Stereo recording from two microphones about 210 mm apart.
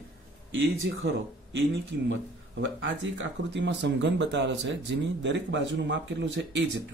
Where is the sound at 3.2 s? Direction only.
55° right (ahead or behind).